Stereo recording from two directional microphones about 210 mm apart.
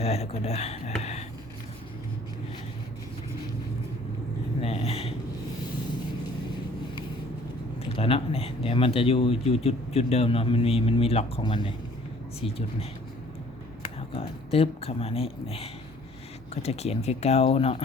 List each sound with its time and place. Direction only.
0.0 s a man's voice: 30° left (ahead or behind)
4.6 s a sound: 30° left (ahead or behind)
7.9 s a man's voice: 25° left (ahead or behind)
14.1 s a man's voice: 25° left (ahead or behind)